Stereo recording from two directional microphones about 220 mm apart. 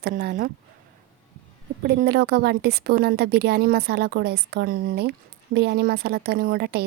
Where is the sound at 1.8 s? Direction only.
45° right (ahead or behind).